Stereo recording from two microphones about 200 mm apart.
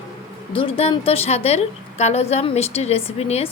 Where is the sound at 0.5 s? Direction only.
30° left (ahead or behind).